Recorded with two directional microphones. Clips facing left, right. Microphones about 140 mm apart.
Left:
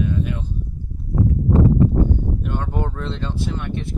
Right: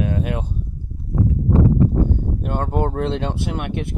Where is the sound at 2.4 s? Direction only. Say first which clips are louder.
Right 4 dB; 45° right (ahead or behind); by 3.9 s 60° right (ahead or behind).